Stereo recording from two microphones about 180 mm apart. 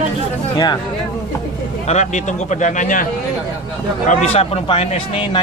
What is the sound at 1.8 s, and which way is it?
Speech, 40° left (ahead or behind).